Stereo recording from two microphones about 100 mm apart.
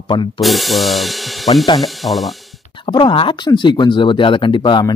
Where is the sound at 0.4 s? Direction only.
Centre (ahead or behind).